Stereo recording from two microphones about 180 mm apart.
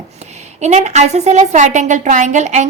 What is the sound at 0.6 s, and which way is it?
A woman's voice, 40° right (ahead or behind).